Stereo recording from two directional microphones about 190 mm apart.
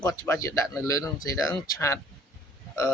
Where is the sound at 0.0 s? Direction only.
20° left (ahead or behind).